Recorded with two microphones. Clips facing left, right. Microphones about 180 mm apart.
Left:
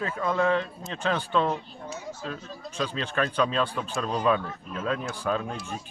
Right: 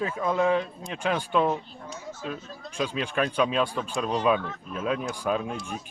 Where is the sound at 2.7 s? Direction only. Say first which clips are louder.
Right 1 dB; 10° right (ahead or behind).